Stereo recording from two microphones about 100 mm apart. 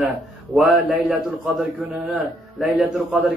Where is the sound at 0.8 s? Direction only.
10° right (ahead or behind).